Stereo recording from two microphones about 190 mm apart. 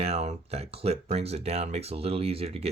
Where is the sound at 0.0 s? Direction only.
35° right (ahead or behind).